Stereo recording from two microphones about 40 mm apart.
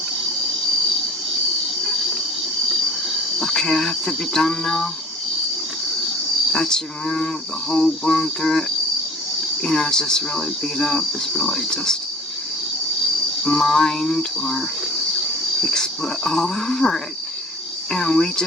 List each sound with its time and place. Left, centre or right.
3.4 s speech: centre
6.5 s speech: centre
9.6 s speech: centre
13.4 s speech: centre
15.6 s speech: centre